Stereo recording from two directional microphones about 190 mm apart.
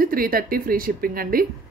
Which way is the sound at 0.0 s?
50° right (ahead or behind).